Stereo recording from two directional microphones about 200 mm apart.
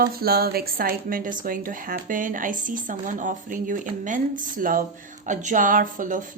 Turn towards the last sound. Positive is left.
turn(degrees=-40)  # may be behind; listen again after turning